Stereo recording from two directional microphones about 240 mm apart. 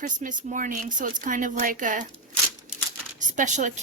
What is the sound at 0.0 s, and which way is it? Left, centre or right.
Speech, right.